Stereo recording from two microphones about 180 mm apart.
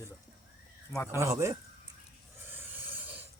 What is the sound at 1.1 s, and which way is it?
Speech, 15° right (ahead or behind).